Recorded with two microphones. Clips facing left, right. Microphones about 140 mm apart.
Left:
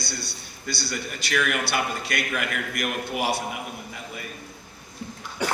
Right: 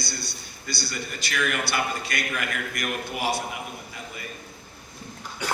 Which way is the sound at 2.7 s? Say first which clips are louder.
Left 2 dB; 55° left (ahead or behind).